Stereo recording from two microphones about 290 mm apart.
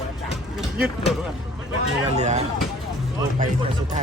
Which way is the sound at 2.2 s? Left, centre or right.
Right.